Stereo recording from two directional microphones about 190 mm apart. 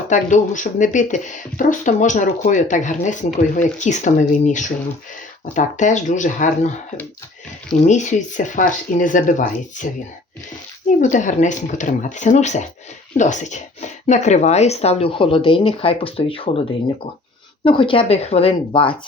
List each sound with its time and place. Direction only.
0.1 s speech: 40° left (ahead or behind)
7.9 s speech: 40° left (ahead or behind)
11.0 s a woman's voice: 40° left (ahead or behind)